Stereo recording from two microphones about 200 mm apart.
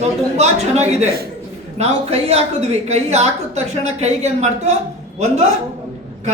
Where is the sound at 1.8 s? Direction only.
30° right (ahead or behind).